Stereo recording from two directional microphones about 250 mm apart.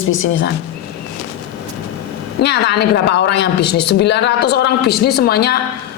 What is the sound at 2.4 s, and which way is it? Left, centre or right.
A woman's voice, left.